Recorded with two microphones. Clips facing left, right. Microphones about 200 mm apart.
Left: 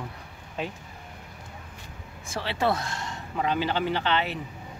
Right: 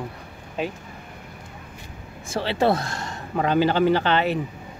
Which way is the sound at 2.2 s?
30° right (ahead or behind).